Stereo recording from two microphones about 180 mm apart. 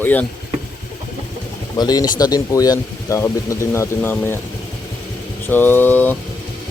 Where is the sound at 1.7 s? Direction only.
20° left (ahead or behind).